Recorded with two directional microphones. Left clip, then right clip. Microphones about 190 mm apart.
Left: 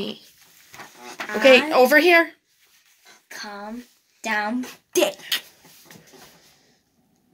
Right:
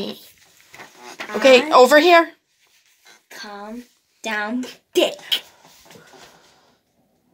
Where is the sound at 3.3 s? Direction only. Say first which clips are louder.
Even; 25° left (ahead or behind).